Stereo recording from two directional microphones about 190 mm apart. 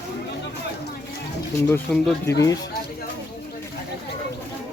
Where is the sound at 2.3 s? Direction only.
15° left (ahead or behind).